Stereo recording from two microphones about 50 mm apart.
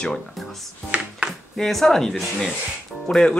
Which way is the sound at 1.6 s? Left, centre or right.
Centre.